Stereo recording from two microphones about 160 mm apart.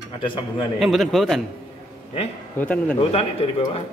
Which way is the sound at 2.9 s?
35° left (ahead or behind).